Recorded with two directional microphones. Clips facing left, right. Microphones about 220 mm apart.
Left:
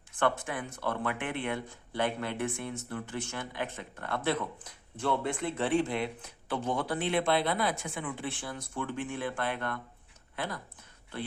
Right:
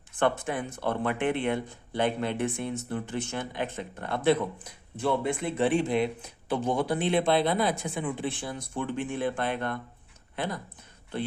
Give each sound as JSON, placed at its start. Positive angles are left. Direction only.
{"t": 0.2, "sound": "speech", "side_deg": -20}